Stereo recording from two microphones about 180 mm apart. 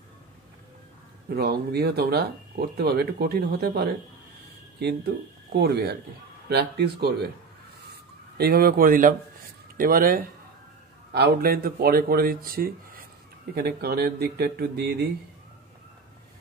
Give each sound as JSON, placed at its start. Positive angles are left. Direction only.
{"t": 1.3, "sound": "speech", "side_deg": -60}
{"t": 7.9, "sound": "a sound", "side_deg": -60}
{"t": 9.8, "sound": "speech", "side_deg": -55}